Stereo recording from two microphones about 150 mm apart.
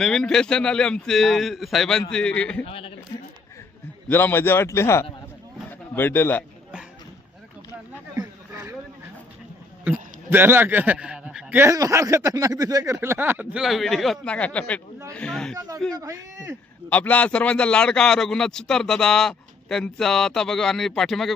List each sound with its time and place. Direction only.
0.0 s a man's voice: 5° left (ahead or behind)
2.6 s speech: 40° left (ahead or behind)
4.1 s speech: 15° left (ahead or behind)
8.2 s a sound: 25° right (ahead or behind)
9.8 s a man's voice: 15° right (ahead or behind)
11.6 s a man's voice: 20° right (ahead or behind); by 15.5 s 5° left (ahead or behind)
15.5 s a man's voice: 20° right (ahead or behind)
16.9 s a man's voice: 10° left (ahead or behind)